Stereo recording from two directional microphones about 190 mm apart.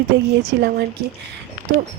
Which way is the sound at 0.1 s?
70° right (ahead or behind).